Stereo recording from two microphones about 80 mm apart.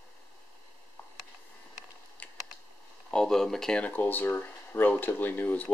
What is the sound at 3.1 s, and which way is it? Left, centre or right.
Speech, centre.